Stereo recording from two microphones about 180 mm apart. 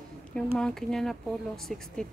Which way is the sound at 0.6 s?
5° left (ahead or behind).